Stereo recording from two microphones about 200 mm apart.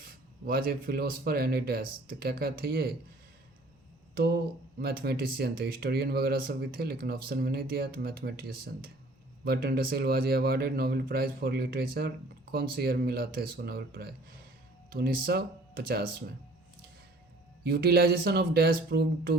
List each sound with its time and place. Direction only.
0.0 s a man's voice: 50° right (ahead or behind)
4.1 s a man's voice: 50° right (ahead or behind)
17.6 s a man's voice: 50° right (ahead or behind)